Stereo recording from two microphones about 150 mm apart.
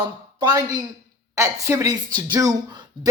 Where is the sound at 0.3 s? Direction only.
25° right (ahead or behind).